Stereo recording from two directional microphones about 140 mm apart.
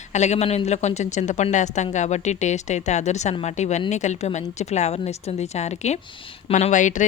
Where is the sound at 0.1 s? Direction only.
55° left (ahead or behind).